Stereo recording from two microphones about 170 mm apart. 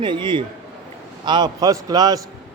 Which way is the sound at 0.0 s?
30° right (ahead or behind).